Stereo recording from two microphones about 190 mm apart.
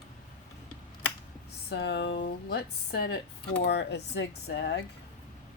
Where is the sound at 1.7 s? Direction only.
65° left (ahead or behind).